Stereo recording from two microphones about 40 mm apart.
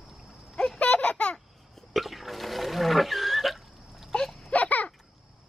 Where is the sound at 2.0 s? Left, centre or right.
Centre.